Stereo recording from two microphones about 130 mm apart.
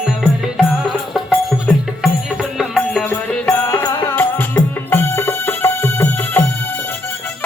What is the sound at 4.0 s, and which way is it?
Music, 15° left (ahead or behind).